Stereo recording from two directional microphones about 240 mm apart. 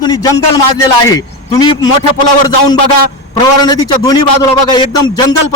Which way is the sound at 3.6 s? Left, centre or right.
Centre.